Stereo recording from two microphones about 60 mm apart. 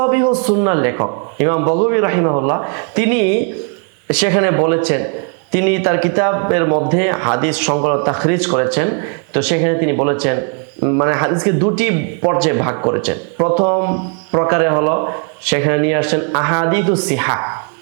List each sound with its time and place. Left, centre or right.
0.0 s a man's voice: right